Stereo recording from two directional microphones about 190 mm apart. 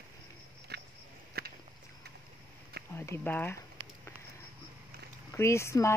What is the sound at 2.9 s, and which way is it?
Speech, 15° left (ahead or behind).